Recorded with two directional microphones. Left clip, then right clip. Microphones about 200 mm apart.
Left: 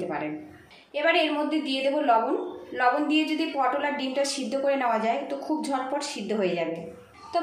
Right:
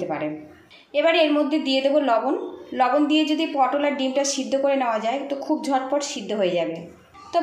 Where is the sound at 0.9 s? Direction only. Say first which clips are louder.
Right 5 dB; 30° right (ahead or behind).